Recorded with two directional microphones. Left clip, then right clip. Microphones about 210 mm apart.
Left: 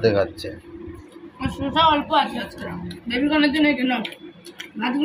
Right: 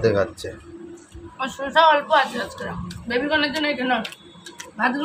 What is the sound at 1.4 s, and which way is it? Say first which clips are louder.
A man's voice: right 2 dB; 55° right (ahead or behind).